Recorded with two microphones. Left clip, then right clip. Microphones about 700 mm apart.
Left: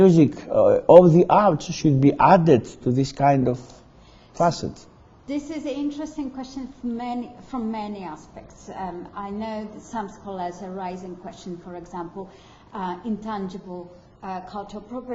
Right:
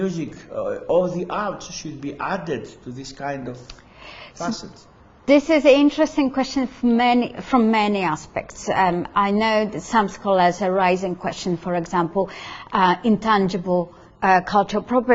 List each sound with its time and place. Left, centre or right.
0.0 s a man's voice: left
5.2 s a woman's voice: right
14.2 s speech: right